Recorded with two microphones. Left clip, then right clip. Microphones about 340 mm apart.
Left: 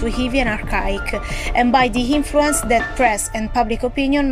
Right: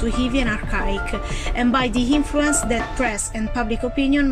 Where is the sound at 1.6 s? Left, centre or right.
Centre.